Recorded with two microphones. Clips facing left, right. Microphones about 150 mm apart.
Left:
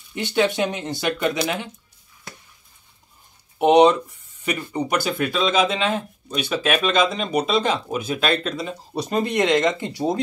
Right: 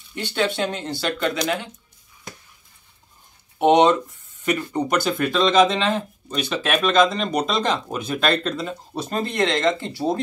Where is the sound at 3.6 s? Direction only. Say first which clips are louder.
Left 1 dB; 10° left (ahead or behind).